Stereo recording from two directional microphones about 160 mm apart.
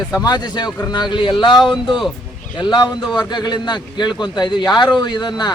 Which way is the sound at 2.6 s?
30° left (ahead or behind).